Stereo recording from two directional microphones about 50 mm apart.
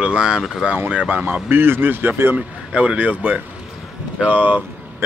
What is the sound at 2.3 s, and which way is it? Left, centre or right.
Speech, right.